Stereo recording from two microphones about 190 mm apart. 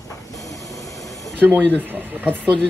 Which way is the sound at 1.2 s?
10° right (ahead or behind).